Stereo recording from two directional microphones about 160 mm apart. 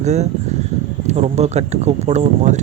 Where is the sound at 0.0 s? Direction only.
45° right (ahead or behind).